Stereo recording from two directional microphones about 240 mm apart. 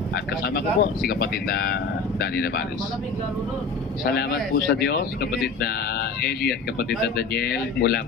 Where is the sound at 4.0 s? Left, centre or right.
Left.